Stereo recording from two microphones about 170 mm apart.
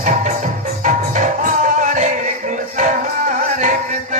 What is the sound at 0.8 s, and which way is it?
Music, 45° right (ahead or behind).